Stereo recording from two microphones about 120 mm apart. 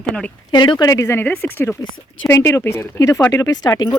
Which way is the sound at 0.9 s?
25° left (ahead or behind).